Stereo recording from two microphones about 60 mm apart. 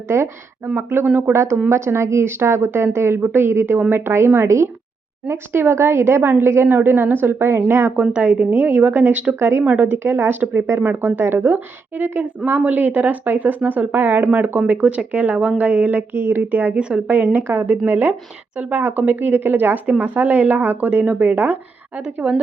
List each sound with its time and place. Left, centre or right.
0.1 s a woman's voice: right
4.4 s speech: right
5.3 s a woman's voice: right
8.0 s speech: centre
8.4 s a woman's voice: right